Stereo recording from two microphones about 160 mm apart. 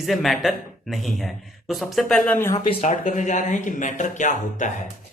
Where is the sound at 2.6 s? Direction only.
40° left (ahead or behind).